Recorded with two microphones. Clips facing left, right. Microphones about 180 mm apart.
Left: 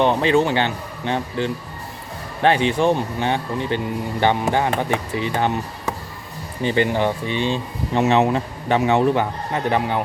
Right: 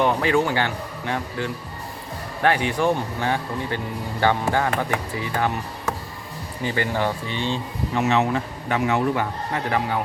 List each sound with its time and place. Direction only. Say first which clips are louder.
0.0 s speech: left 3 dB; 25° left (ahead or behind)
7.9 s speech: left 4 dB; 25° left (ahead or behind)